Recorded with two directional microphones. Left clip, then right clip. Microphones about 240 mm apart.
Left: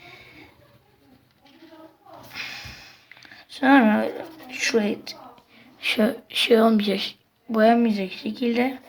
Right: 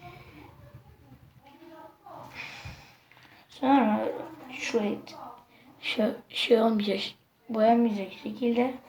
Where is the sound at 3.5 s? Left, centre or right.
Left.